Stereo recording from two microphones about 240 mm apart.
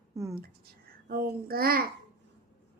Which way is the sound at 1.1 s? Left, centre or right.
Right.